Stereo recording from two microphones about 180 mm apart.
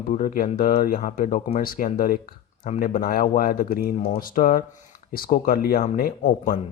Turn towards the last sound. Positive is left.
turn(degrees=50)  # may be behind; listen again after turning